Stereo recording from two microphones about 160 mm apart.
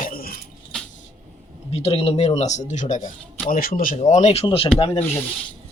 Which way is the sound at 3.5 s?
60° left (ahead or behind).